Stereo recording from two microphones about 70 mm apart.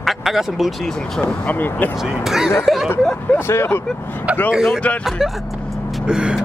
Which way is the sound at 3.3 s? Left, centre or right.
Left.